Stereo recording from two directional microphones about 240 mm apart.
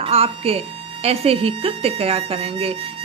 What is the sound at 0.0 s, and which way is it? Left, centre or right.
A woman's voice, right.